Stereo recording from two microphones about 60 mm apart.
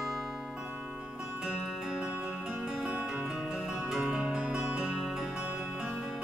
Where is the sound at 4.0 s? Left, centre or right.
Centre.